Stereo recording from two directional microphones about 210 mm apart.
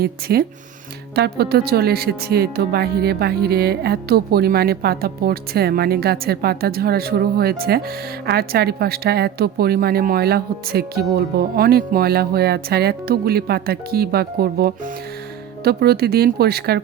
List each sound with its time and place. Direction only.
0.0 s speech: 50° right (ahead or behind)